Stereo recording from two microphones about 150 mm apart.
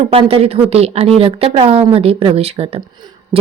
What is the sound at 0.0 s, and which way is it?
A woman's voice, 40° right (ahead or behind).